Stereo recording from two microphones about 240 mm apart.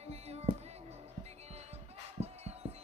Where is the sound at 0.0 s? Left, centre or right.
Right.